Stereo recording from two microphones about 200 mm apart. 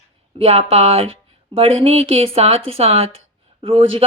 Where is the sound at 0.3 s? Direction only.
30° right (ahead or behind).